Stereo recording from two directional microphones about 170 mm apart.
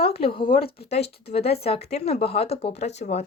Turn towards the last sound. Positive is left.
turn(degrees=40)  # may be behind; listen again after turning